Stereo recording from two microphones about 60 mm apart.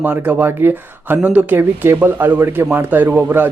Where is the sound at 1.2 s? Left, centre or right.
Right.